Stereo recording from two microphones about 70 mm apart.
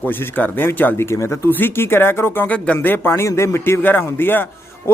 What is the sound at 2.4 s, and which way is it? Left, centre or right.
Speech, centre.